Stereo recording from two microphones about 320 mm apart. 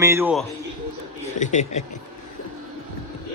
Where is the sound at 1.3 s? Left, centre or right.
Left.